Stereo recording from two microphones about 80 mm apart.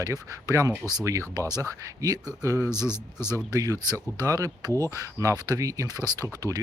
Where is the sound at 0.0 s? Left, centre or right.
Right.